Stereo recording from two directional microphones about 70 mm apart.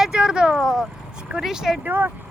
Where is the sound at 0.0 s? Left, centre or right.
Centre.